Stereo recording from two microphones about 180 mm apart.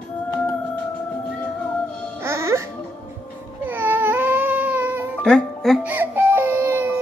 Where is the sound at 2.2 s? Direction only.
15° right (ahead or behind).